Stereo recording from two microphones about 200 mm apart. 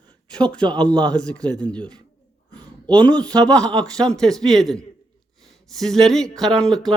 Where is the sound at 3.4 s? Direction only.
5° left (ahead or behind).